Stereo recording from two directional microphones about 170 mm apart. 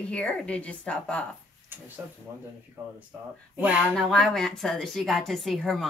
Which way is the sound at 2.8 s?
15° right (ahead or behind).